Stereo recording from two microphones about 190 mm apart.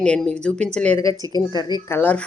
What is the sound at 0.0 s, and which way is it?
Speech, 5° left (ahead or behind).